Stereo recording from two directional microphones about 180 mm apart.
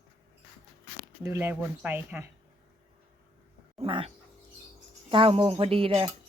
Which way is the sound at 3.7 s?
30° right (ahead or behind).